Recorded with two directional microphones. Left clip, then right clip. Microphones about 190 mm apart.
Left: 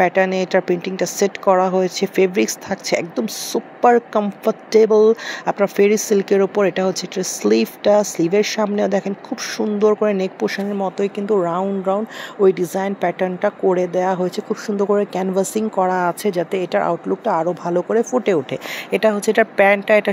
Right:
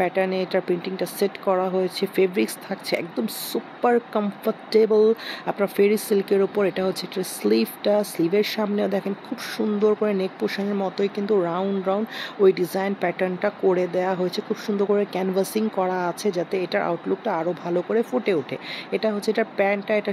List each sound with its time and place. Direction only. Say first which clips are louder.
0.0 s speech: left 6 dB; 15° left (ahead or behind)